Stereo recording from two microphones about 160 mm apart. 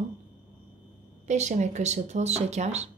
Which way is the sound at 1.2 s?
45° right (ahead or behind).